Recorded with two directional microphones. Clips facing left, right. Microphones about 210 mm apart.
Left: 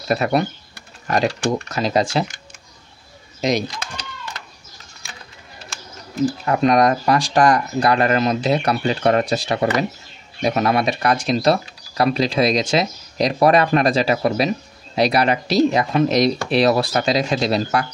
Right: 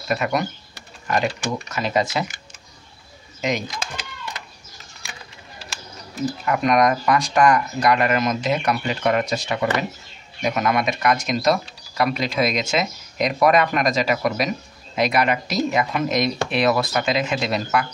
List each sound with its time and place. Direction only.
0.1 s speech: 35° left (ahead or behind)
3.3 s speech: 35° left (ahead or behind)
6.4 s speech: 30° left (ahead or behind)